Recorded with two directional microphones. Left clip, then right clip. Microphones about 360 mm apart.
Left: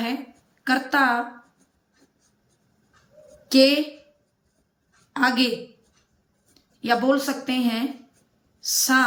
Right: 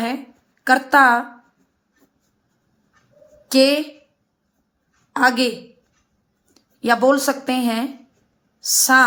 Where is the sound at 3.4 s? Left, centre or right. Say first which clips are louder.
Right 2 dB; centre.